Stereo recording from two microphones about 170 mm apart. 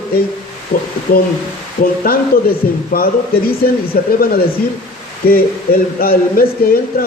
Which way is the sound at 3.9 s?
60° left (ahead or behind).